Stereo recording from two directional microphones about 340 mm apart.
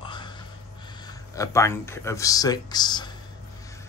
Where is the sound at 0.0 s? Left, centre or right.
Centre.